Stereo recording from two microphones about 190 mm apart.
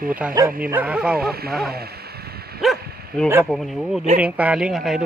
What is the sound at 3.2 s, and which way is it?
Speech, 5° left (ahead or behind).